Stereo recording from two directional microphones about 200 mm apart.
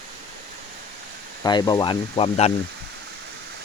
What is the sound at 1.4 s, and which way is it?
Speech, 20° left (ahead or behind).